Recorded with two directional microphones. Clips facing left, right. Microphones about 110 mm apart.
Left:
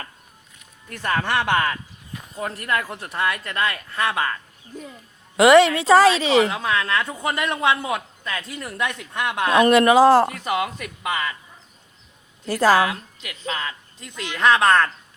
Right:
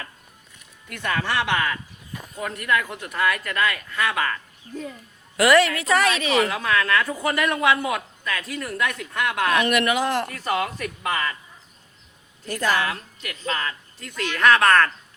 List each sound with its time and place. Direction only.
0.9 s speech: 35° left (ahead or behind)
1.2 s a woman's voice: 50° left (ahead or behind); by 4.4 s 25° left (ahead or behind)
5.4 s a woman's voice: 25° left (ahead or behind)
10.3 s speech: 15° left (ahead or behind)
12.8 s a woman's voice: 15° left (ahead or behind)